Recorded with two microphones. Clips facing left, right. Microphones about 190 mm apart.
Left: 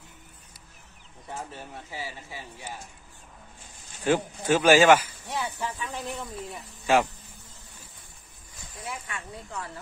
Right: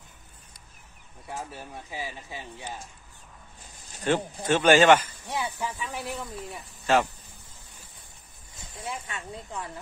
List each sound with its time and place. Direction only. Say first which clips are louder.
1.5 s speech: right 1 dB; 15° right (ahead or behind)
4.0 s speech: left 1 dB; 10° left (ahead or behind)
5.2 s speech: even; 10° right (ahead or behind)
6.9 s speech: left 1 dB; 10° left (ahead or behind)
8.5 s speech: right 2 dB; 25° right (ahead or behind)